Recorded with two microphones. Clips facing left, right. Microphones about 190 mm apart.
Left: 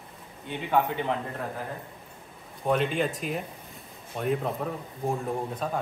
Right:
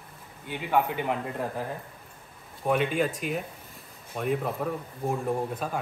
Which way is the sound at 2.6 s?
15° right (ahead or behind).